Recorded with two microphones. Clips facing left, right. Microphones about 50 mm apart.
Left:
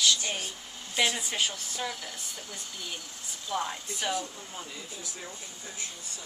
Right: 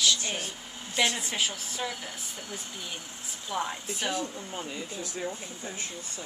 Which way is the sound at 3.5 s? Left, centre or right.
Centre.